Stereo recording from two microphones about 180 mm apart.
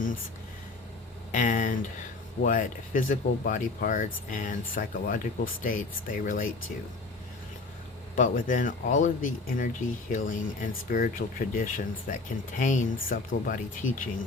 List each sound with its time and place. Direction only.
1.3 s speech: 45° left (ahead or behind)
8.1 s speech: 45° left (ahead or behind)